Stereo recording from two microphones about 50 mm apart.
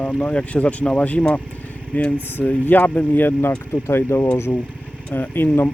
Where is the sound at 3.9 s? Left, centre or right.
Left.